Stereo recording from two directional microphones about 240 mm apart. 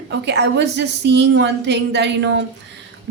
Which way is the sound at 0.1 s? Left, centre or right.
Right.